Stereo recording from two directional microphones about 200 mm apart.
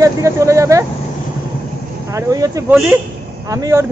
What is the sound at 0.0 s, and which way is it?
Vehicle, 15° right (ahead or behind).